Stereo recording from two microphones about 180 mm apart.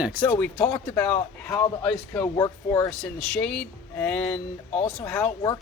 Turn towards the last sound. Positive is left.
turn(degrees=10)  # may be behind; listen again after turning